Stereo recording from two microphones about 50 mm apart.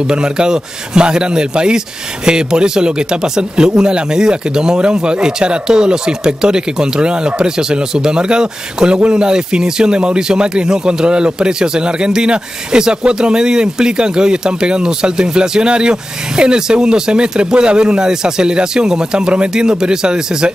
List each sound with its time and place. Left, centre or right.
0.1 s speech: centre